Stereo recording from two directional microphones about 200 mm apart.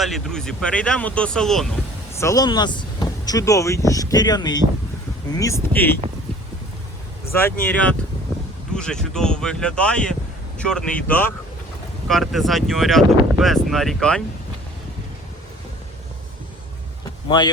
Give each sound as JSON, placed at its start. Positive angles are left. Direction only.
{"t": 0.0, "sound": "speech", "side_deg": 0}
{"t": 2.1, "sound": "speech", "side_deg": 15}
{"t": 7.6, "sound": "speech", "side_deg": 5}
{"t": 17.2, "sound": "speech", "side_deg": 20}